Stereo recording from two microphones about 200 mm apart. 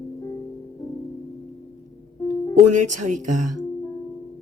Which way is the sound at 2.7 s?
40° right (ahead or behind).